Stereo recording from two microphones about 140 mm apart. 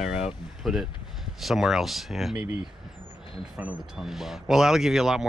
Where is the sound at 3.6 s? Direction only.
15° right (ahead or behind).